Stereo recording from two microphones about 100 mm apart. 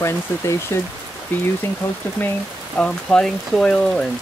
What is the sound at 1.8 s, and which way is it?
Speech, 25° left (ahead or behind).